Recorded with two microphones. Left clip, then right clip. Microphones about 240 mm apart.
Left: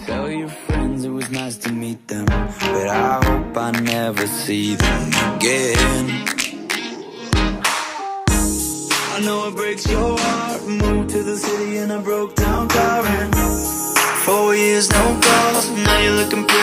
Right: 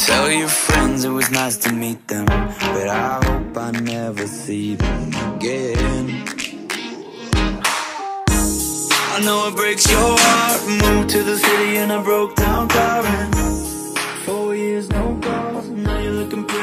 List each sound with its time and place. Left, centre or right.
0.0 s music: right
2.3 s music: centre
3.9 s music: left
7.3 s music: centre
9.8 s music: right
11.7 s music: right
12.4 s music: centre
13.1 s music: centre
13.9 s music: left
14.3 s music: left
15.8 s music: left